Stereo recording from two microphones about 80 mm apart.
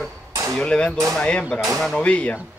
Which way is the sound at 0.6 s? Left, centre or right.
Centre.